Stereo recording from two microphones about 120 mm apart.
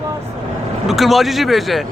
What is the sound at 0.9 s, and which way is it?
Speech, centre (ahead or behind).